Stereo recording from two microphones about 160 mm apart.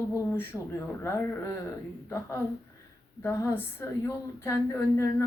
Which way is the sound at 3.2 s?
15° left (ahead or behind).